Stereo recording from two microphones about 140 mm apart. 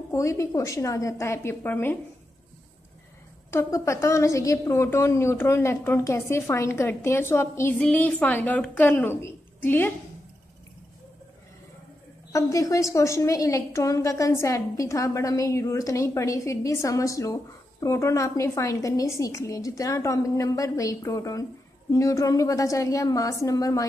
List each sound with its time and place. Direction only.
0.1 s a woman's voice: 20° left (ahead or behind)
3.4 s a woman's voice: 20° left (ahead or behind)
12.3 s a woman's voice: 25° left (ahead or behind)